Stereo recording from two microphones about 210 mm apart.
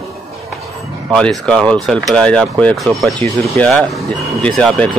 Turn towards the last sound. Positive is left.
turn(degrees=5)  # may be behind; listen again after turning